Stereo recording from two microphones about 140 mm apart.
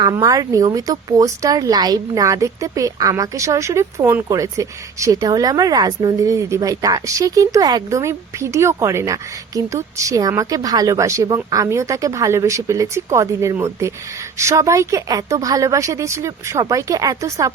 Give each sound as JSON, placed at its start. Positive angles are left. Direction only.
{"t": 0.0, "sound": "speech", "side_deg": -25}